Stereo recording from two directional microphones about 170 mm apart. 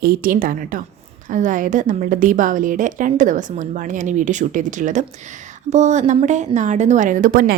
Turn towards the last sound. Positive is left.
turn(degrees=-55)  # may be behind; listen again after turning